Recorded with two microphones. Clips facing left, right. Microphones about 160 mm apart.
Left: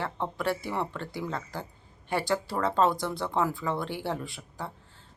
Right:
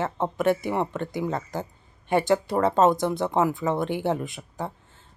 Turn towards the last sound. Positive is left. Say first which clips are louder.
# right 6 dB
turn(degrees=-20)  # may be behind; listen again after turning